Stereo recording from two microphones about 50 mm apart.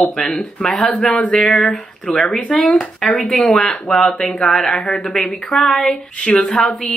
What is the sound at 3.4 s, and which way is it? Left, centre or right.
Speech, centre.